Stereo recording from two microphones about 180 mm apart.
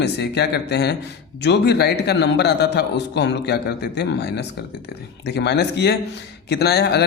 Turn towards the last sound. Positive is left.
turn(degrees=65)  # may be behind; listen again after turning